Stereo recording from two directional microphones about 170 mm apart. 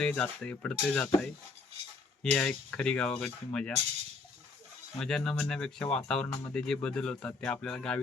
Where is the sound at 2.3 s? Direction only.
5° left (ahead or behind).